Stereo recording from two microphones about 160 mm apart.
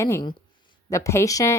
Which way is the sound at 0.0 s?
15° left (ahead or behind).